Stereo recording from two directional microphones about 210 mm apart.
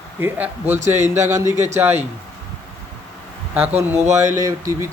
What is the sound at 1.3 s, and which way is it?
Speech, 15° right (ahead or behind).